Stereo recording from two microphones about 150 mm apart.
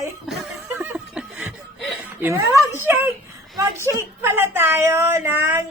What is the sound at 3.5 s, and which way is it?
A woman's voice, 20° right (ahead or behind).